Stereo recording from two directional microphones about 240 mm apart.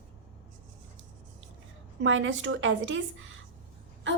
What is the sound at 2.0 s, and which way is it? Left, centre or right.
A woman's voice, right.